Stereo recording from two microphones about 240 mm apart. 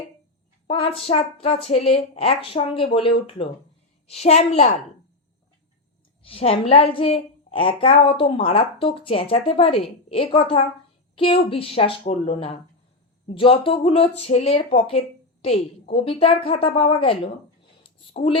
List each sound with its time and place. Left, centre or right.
0.7 s a woman's voice: left
6.2 s a woman's voice: left